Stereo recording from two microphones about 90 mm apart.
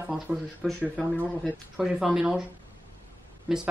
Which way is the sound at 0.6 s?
5° left (ahead or behind).